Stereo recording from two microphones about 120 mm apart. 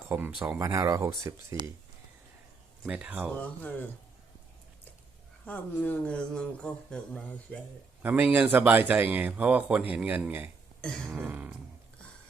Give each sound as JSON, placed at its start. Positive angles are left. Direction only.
{"t": 0.1, "sound": "speech", "side_deg": -15}
{"t": 0.6, "sound": "speech", "side_deg": -30}
{"t": 2.8, "sound": "speech", "side_deg": -10}
{"t": 3.3, "sound": "speech", "side_deg": 15}
{"t": 5.5, "sound": "speech", "side_deg": 15}
{"t": 8.0, "sound": "speech", "side_deg": -10}